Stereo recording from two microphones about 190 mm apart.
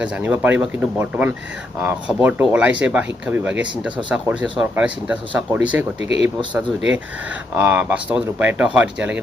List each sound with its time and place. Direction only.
0.0 s speech: 10° right (ahead or behind)
6.0 s speech: 30° left (ahead or behind)
6.2 s speech: 5° right (ahead or behind)